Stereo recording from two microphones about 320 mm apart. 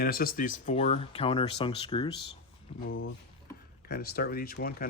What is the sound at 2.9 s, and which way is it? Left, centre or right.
Speech, left.